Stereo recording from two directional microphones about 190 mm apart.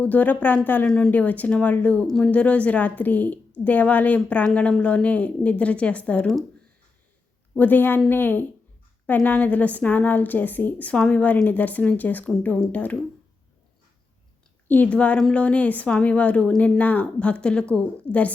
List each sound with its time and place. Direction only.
0.0 s a woman's voice: 10° left (ahead or behind)
7.6 s a woman's voice: 10° left (ahead or behind)
14.7 s a woman's voice: 5° left (ahead or behind)